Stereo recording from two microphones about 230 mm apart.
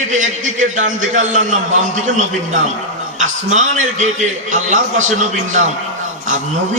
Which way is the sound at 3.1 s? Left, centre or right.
Right.